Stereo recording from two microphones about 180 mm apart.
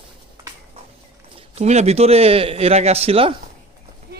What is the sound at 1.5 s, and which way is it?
Speech, 40° right (ahead or behind).